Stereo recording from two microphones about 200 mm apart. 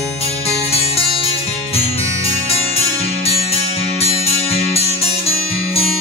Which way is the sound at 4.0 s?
30° left (ahead or behind).